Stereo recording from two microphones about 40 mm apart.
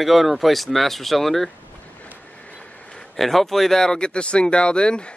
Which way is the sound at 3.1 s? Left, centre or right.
Centre.